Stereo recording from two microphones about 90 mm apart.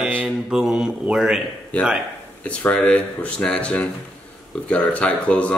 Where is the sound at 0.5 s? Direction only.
5° right (ahead or behind).